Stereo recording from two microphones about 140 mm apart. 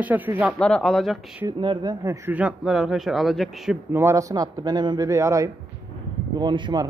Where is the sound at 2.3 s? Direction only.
5° right (ahead or behind).